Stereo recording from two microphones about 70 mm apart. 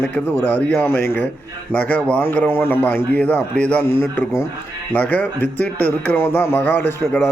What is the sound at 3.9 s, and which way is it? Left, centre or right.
Speech, left.